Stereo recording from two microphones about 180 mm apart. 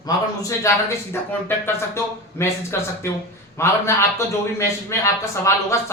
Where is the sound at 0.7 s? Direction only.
15° left (ahead or behind).